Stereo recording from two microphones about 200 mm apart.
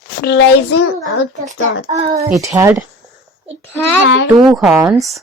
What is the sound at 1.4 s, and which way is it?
Speech, 35° right (ahead or behind).